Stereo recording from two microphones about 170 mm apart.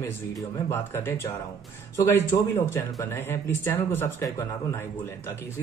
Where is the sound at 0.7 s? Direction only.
15° left (ahead or behind).